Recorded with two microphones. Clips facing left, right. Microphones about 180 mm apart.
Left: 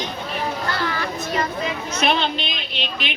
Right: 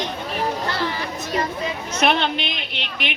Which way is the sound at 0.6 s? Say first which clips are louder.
Even; 25° right (ahead or behind).